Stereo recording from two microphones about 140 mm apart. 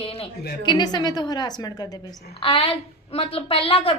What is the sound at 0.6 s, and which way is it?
A woman's voice, 30° left (ahead or behind).